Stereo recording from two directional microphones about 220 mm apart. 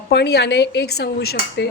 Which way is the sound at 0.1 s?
50° left (ahead or behind).